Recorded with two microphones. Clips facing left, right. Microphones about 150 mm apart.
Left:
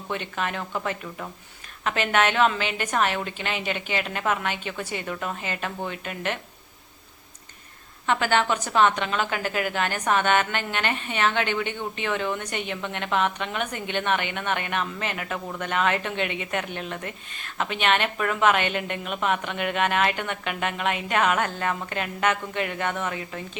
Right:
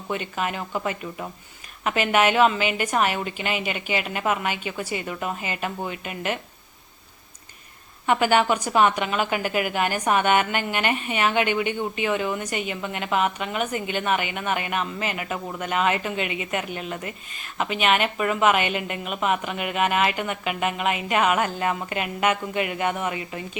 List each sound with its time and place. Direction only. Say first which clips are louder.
0.1 s a woman's voice: right 2 dB; 5° right (ahead or behind)
8.0 s a woman's voice: right 3 dB; 10° right (ahead or behind)